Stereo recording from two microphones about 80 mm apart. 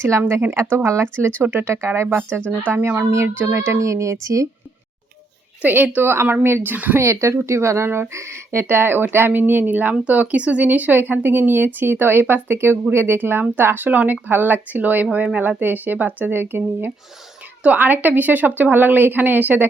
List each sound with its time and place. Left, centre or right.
0.1 s speech: right
5.6 s speech: right
7.0 s speech: right